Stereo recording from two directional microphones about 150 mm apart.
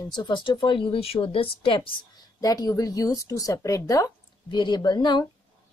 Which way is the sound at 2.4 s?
25° left (ahead or behind).